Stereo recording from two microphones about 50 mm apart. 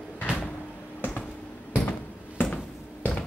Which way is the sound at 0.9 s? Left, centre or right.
Left.